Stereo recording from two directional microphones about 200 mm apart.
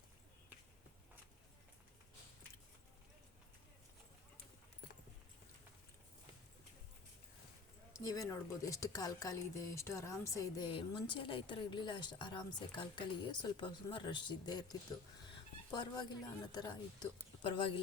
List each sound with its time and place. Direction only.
7.9 s speech: 15° left (ahead or behind)